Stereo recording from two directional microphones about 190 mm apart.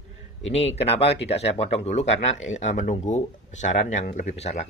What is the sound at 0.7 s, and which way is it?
Speech, 35° left (ahead or behind).